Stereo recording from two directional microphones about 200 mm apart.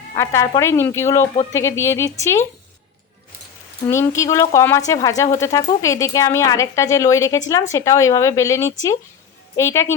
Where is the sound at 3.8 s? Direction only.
15° left (ahead or behind).